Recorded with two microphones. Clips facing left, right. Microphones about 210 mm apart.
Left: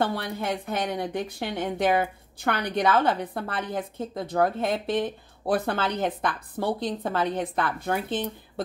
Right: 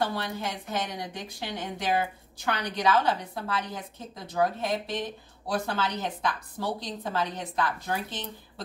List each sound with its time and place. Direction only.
0.0 s a woman's voice: 55° left (ahead or behind)